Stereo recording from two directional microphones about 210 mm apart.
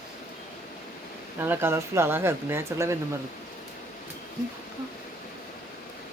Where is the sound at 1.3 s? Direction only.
10° right (ahead or behind).